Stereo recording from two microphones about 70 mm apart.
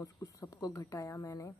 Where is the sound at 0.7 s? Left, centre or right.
Left.